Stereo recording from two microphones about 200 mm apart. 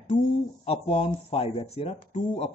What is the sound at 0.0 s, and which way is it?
Speech, 35° left (ahead or behind).